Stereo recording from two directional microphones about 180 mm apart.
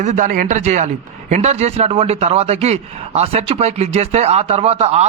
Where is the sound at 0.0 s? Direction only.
45° right (ahead or behind).